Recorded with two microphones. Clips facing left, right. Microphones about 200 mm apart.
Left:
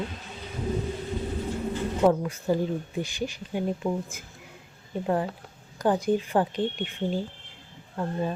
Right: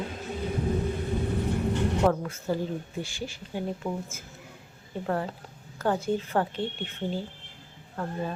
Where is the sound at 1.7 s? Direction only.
70° right (ahead or behind).